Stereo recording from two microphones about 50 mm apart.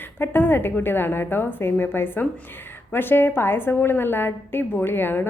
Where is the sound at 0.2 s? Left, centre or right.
Left.